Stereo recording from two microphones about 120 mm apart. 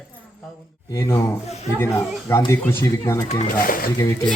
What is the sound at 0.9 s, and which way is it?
A man's voice, 25° left (ahead or behind).